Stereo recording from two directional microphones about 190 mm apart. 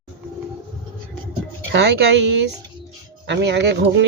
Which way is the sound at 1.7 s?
65° right (ahead or behind).